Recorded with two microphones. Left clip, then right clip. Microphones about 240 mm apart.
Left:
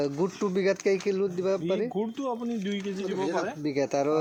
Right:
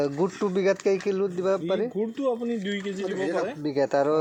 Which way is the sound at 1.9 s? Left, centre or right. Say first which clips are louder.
Right 4 dB; left.